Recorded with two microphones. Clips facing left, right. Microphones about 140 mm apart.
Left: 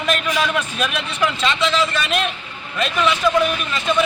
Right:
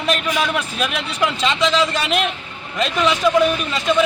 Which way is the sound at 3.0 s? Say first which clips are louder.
Right 1 dB; 20° right (ahead or behind).